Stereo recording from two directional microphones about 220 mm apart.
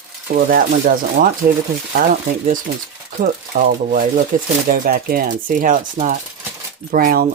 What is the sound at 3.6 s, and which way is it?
Speech, 40° right (ahead or behind).